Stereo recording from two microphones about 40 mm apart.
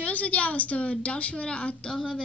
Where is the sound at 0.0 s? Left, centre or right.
Left.